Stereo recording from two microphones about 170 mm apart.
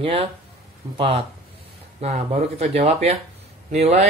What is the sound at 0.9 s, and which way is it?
Speech, 35° right (ahead or behind).